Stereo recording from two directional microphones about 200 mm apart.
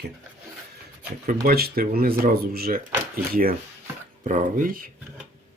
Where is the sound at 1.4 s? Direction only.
50° right (ahead or behind).